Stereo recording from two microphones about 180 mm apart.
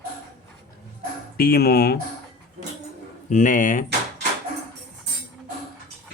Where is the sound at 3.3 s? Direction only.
45° left (ahead or behind).